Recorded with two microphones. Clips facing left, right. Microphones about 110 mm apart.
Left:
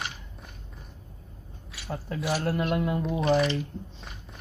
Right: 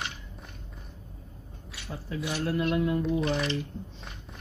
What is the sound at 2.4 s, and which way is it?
Speech, 60° left (ahead or behind).